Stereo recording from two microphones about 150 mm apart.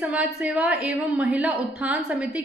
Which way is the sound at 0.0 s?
10° right (ahead or behind).